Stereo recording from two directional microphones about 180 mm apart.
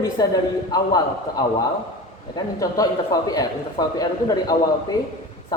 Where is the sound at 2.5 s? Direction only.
20° left (ahead or behind).